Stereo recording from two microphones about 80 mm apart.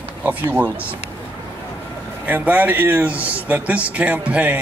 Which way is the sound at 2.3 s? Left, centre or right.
Centre.